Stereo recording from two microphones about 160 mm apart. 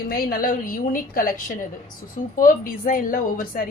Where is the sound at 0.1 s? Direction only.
65° left (ahead or behind).